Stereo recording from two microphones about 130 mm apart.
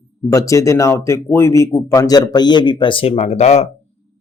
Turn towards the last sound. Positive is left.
turn(degrees=55)  # may be behind; listen again after turning